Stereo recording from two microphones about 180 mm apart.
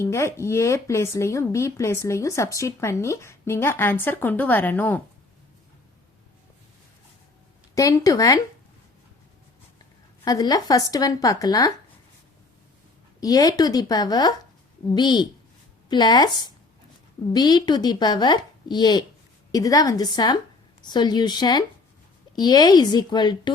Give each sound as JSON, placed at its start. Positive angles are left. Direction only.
{"t": 0.0, "sound": "a woman's voice", "side_deg": 15}
{"t": 7.8, "sound": "speech", "side_deg": 20}
{"t": 10.2, "sound": "speech", "side_deg": 20}
{"t": 13.1, "sound": "speech", "side_deg": 20}